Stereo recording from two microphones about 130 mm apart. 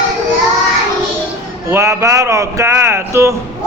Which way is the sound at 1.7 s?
20° right (ahead or behind).